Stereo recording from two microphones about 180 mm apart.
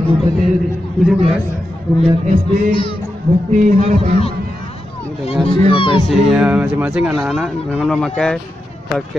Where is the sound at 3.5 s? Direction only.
40° right (ahead or behind).